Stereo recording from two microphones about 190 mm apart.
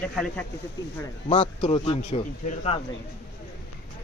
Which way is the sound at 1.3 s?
25° left (ahead or behind).